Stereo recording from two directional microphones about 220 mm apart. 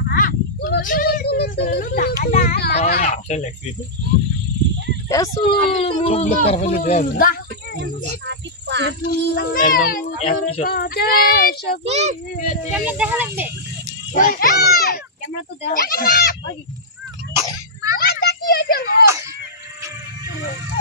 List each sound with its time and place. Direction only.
0.1 s a sound: 45° left (ahead or behind)
2.9 s a child's voice: 35° left (ahead or behind)
5.1 s speech: 15° left (ahead or behind)
5.5 s speech: 25° left (ahead or behind)
8.3 s a sound: 50° right (ahead or behind)
9.0 s a child's voice: 45° left (ahead or behind)
10.7 s child singing: 45° left (ahead or behind)
11.8 s a child's voice: 30° right (ahead or behind)
12.7 s speech: 5° right (ahead or behind)
14.1 s child singing: 40° left (ahead or behind)
17.9 s children playing: 45° left (ahead or behind)